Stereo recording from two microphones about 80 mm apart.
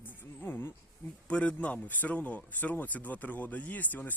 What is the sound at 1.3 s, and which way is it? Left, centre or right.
Speech, centre.